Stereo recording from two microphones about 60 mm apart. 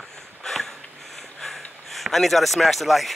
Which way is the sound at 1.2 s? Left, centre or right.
Centre.